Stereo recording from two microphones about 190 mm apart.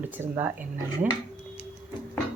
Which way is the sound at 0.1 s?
10° right (ahead or behind).